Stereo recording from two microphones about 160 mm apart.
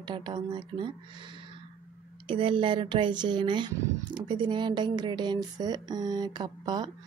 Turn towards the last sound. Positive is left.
turn(degrees=-25)  # may be behind; listen again after turning